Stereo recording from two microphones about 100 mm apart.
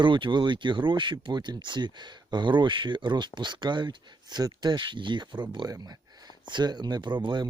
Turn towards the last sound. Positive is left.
turn(degrees=-50)  # may be behind; listen again after turning